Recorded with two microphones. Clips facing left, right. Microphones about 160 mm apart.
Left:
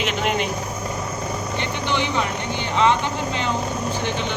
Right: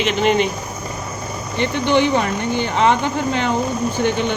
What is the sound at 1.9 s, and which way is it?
Speech, 55° right (ahead or behind).